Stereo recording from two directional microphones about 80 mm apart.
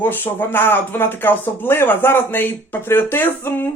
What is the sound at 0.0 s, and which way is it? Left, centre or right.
Speech, left.